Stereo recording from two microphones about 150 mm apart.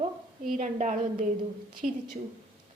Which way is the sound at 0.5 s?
55° right (ahead or behind).